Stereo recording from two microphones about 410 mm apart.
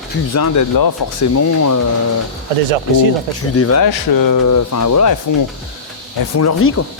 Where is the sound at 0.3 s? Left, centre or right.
Left.